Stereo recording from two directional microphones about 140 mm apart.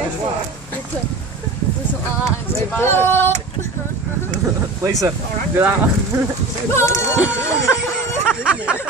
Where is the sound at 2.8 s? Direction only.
15° left (ahead or behind).